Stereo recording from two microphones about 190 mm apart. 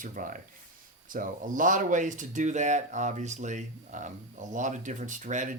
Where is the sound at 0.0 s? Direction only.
45° right (ahead or behind).